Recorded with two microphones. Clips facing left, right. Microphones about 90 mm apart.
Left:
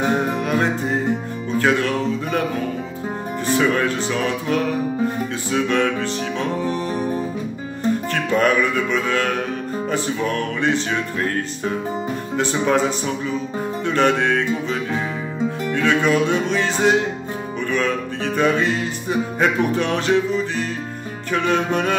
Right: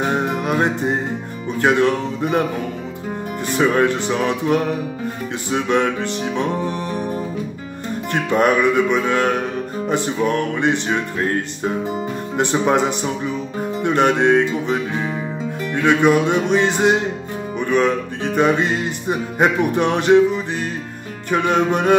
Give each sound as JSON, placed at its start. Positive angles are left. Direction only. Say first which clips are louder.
{"t": 0.2, "sound": "music", "louder": "right 1 dB", "side_deg": -20}
{"t": 3.5, "sound": "music", "louder": "right 3 dB", "side_deg": -25}
{"t": 8.1, "sound": "music", "louder": "right 4 dB", "side_deg": -20}
{"t": 21.3, "sound": "music", "louder": "right 3 dB", "side_deg": -20}